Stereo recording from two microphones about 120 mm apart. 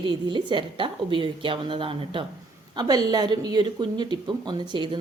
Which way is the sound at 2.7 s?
35° right (ahead or behind).